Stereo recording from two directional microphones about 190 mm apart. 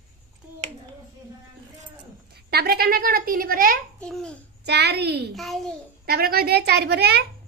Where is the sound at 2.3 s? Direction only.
55° right (ahead or behind).